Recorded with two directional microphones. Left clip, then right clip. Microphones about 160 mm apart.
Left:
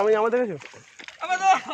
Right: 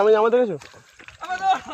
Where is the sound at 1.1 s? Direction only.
10° left (ahead or behind).